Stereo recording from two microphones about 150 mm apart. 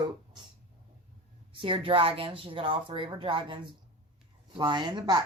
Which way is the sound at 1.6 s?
35° right (ahead or behind).